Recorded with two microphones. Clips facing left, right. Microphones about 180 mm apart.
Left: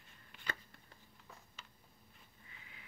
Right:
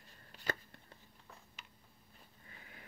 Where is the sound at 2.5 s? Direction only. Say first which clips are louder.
Right 5 dB; 45° right (ahead or behind).